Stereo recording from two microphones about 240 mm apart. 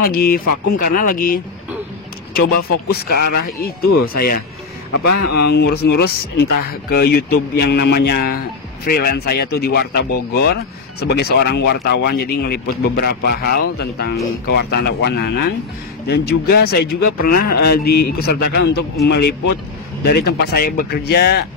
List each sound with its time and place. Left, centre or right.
0.0 s speech: left
2.9 s speech: left
5.5 s speech: left